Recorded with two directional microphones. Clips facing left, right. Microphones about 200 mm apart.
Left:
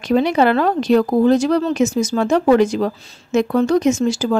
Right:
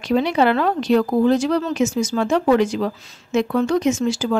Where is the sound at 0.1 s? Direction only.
45° left (ahead or behind).